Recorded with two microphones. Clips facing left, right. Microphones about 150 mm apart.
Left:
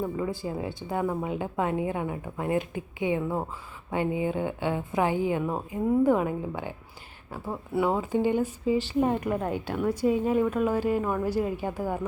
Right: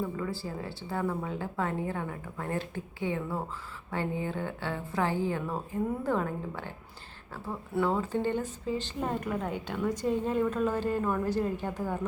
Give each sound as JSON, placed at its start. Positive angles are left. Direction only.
{"t": 0.0, "sound": "speech", "side_deg": 15}